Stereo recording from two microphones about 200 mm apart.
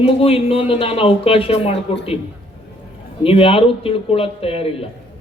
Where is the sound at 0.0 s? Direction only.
30° left (ahead or behind).